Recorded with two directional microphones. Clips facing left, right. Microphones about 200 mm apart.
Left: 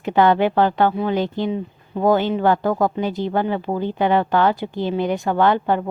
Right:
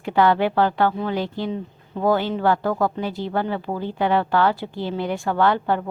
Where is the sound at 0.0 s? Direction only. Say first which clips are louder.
Left 2 dB; 20° left (ahead or behind).